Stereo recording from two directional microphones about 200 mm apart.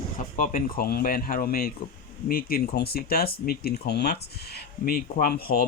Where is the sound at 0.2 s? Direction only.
40° left (ahead or behind).